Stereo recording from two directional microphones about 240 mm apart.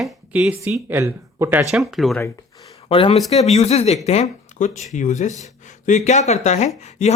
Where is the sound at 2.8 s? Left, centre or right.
Left.